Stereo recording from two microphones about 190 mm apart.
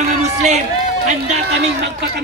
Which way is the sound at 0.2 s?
35° right (ahead or behind).